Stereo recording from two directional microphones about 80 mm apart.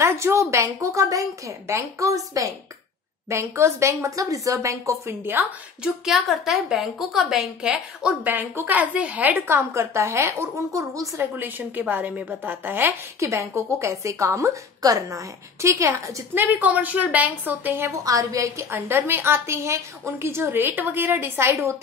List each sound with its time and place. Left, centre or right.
0.0 s a woman's voice: right
6.0 s a woman's voice: centre; by 11.1 s right
11.1 s a woman's voice: right
13.2 s a woman's voice: right
16.3 s a woman's voice: right
17.9 s a woman's voice: right